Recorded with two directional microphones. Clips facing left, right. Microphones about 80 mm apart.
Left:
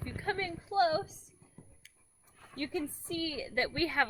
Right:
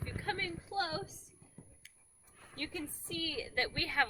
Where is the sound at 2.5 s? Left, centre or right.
Left.